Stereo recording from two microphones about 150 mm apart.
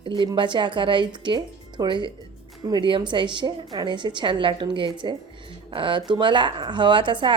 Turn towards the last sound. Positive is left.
turn(degrees=-35)  # may be behind; listen again after turning